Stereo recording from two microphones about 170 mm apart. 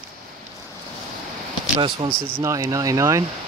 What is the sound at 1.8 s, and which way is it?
Speech, 30° right (ahead or behind).